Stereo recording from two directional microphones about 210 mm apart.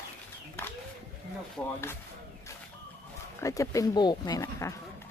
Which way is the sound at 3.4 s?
15° left (ahead or behind).